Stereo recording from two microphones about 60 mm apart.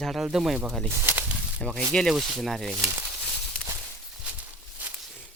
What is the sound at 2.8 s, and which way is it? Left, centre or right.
Speech, right.